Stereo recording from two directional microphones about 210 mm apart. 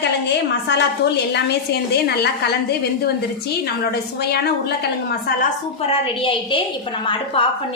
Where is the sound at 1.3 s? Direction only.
50° left (ahead or behind).